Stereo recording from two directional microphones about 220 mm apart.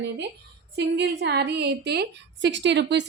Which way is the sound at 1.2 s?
50° right (ahead or behind).